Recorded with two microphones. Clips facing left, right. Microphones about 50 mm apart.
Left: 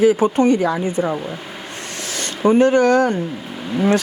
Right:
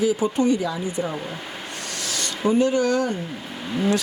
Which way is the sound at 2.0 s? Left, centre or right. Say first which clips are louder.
Left 2 dB; left.